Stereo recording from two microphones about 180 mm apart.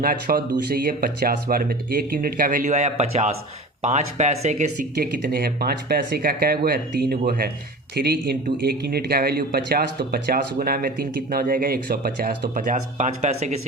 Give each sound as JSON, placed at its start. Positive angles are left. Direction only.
{"t": 0.0, "sound": "a man's voice", "side_deg": -55}